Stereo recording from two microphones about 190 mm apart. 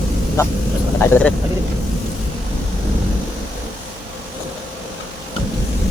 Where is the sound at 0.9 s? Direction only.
10° left (ahead or behind).